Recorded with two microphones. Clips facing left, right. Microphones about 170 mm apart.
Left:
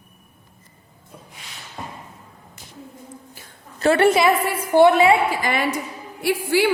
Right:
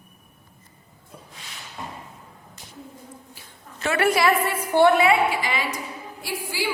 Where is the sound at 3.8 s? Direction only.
30° left (ahead or behind).